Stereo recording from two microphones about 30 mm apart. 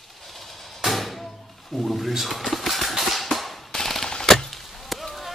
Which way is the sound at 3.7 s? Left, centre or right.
Centre.